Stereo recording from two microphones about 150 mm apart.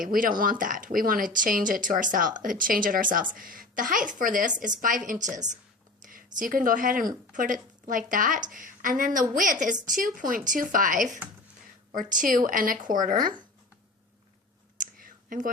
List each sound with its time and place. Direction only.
0.0 s speech: 65° right (ahead or behind)
6.1 s a woman's voice: 65° right (ahead or behind)
14.8 s whispering: 65° right (ahead or behind)